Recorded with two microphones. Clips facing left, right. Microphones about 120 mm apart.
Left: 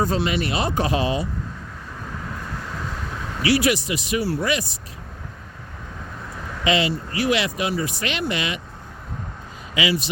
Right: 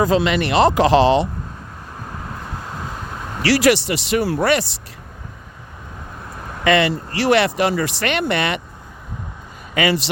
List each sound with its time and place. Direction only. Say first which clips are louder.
0.0 s speech: right 5 dB; 85° right
3.4 s speech: right 4 dB; 85° right
6.7 s speech: right 5 dB; 60° right (ahead or behind)
9.7 s speech: right 4 dB; 55° right (ahead or behind)